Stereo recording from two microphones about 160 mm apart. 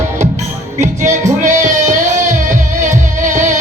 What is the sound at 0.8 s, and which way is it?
Music, 45° right (ahead or behind).